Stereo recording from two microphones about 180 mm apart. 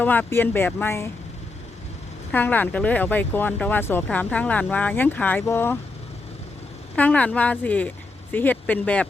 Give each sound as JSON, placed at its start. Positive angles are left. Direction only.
{"t": 0.0, "sound": "speech", "side_deg": 10}
{"t": 2.3, "sound": "speech", "side_deg": 10}
{"t": 6.9, "sound": "speech", "side_deg": 10}